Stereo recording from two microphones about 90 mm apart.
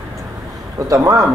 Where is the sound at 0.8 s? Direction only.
40° right (ahead or behind).